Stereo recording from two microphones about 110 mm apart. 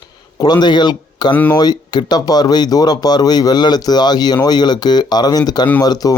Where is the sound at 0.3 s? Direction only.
40° left (ahead or behind).